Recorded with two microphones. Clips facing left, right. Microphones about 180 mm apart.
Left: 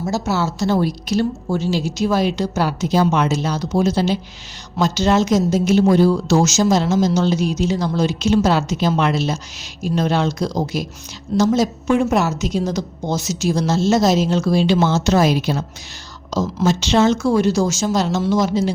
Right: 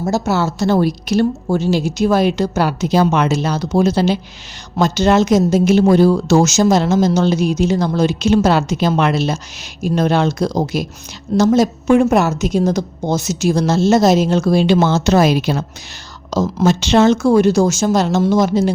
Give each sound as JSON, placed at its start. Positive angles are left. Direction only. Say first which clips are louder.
{"t": 0.0, "sound": "speech", "louder": "right 3 dB", "side_deg": -55}